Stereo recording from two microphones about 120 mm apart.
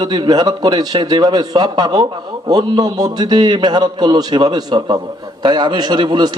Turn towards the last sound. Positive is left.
turn(degrees=-40)  # may be behind; listen again after turning